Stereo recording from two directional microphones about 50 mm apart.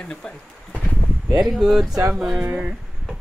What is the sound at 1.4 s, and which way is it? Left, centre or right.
Speech, centre.